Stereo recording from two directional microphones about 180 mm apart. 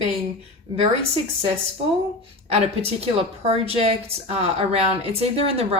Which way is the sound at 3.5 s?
35° right (ahead or behind).